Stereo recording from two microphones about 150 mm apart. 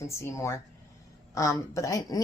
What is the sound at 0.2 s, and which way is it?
Speech, 20° left (ahead or behind).